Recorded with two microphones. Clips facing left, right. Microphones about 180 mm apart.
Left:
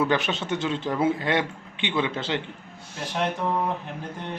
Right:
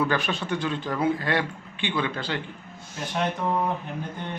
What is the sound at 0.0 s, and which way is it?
A man's voice, 20° left (ahead or behind).